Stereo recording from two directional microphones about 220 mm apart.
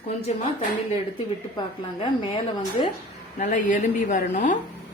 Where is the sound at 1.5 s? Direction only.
20° left (ahead or behind).